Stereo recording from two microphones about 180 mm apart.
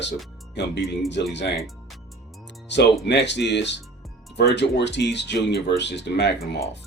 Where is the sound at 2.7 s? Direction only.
75° left (ahead or behind).